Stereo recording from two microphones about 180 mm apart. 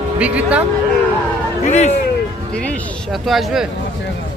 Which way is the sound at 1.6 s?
40° left (ahead or behind).